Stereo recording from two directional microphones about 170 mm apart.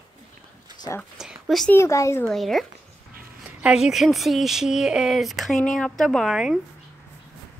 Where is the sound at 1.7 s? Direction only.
15° left (ahead or behind).